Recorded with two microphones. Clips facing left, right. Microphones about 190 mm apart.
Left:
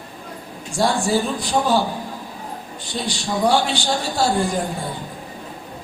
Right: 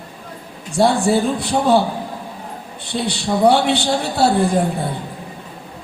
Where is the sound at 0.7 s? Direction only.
60° right (ahead or behind).